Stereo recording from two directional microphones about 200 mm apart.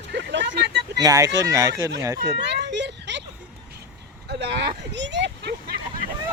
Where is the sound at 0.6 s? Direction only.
55° right (ahead or behind).